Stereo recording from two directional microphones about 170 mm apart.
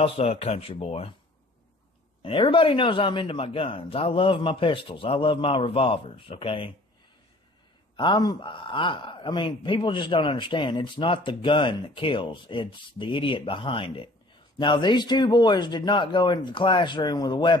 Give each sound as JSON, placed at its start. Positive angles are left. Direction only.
{"t": 0.0, "sound": "a man's voice", "side_deg": 35}
{"t": 2.2, "sound": "a man's voice", "side_deg": 30}
{"t": 7.9, "sound": "a man's voice", "side_deg": 30}